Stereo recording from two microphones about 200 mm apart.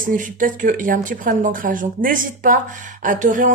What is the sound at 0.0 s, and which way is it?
Speech, 40° right (ahead or behind).